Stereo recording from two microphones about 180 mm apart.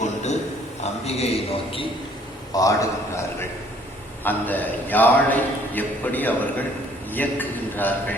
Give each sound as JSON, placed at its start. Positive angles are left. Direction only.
{"t": 0.0, "sound": "a sound", "side_deg": 40}
{"t": 1.0, "sound": "a man's voice", "side_deg": 35}
{"t": 2.5, "sound": "a man's voice", "side_deg": 20}
{"t": 4.2, "sound": "a man's voice", "side_deg": 10}